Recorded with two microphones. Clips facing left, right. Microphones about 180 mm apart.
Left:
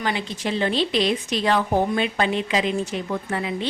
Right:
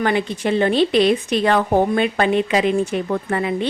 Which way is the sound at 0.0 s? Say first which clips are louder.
Right 7 dB; 55° right (ahead or behind).